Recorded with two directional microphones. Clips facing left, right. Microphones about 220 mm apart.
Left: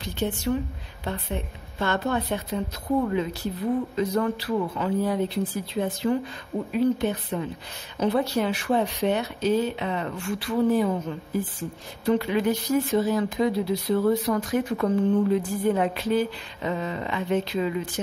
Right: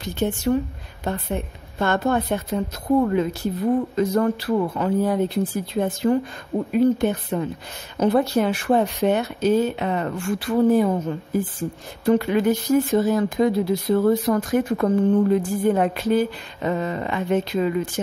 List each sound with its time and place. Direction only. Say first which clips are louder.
0.0 s speech: right 4 dB; 45° right (ahead or behind)
3.9 s speech: right 4 dB; 45° right (ahead or behind)